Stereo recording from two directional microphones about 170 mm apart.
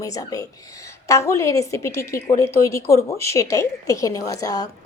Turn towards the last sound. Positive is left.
turn(degrees=20)  # may be behind; listen again after turning